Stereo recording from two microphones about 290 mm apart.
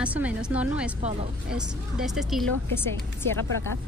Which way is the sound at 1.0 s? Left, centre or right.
Right.